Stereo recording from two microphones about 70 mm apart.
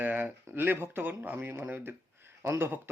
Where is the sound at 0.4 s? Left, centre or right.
Right.